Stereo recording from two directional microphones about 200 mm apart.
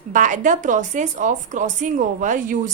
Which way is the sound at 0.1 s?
40° right (ahead or behind).